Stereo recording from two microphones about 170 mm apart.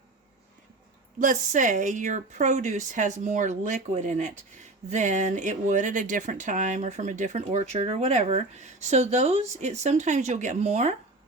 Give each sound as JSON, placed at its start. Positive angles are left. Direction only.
{"t": 1.2, "sound": "speech", "side_deg": -50}